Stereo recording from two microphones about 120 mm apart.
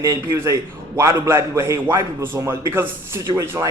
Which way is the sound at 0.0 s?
25° right (ahead or behind).